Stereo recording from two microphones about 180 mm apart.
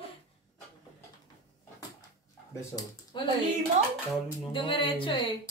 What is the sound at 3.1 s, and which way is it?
Music, 25° left (ahead or behind).